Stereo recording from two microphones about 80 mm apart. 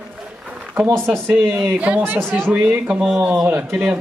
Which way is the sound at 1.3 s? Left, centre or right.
Centre.